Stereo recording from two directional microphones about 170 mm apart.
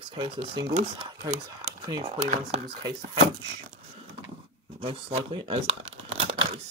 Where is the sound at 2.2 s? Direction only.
40° right (ahead or behind).